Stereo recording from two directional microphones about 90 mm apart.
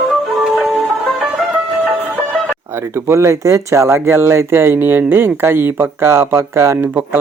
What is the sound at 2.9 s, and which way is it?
Speech, 30° right (ahead or behind).